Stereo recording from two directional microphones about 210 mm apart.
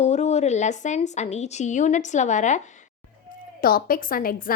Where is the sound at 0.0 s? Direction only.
30° left (ahead or behind).